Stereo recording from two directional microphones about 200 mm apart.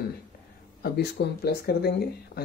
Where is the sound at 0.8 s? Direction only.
50° left (ahead or behind).